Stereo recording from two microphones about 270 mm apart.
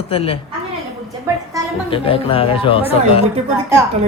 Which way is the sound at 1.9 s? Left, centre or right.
Centre.